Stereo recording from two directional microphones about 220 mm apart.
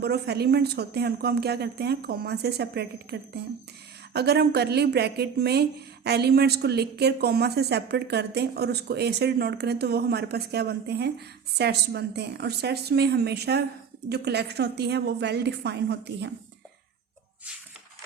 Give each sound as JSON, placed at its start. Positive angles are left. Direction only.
{"t": 0.0, "sound": "speech", "side_deg": -45}